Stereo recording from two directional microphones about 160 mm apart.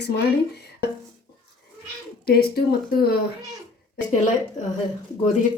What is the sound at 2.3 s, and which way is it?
Speech, 80° left.